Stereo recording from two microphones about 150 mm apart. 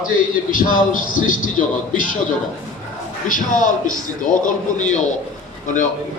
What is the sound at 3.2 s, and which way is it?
A man's voice, 60° left (ahead or behind).